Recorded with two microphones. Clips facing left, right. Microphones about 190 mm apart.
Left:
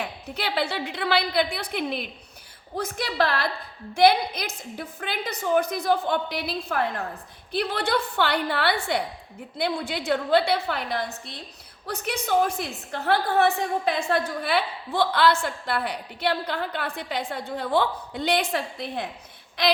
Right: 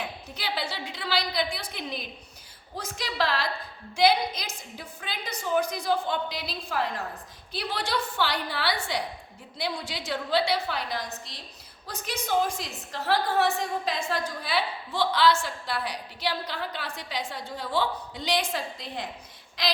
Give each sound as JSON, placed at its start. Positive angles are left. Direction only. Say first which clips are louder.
{"t": 0.0, "sound": "a woman's voice", "louder": "left 4 dB", "side_deg": 60}